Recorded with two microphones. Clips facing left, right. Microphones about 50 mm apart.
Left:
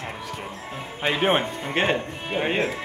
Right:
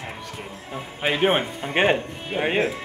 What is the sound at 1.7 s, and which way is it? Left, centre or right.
Speech, centre.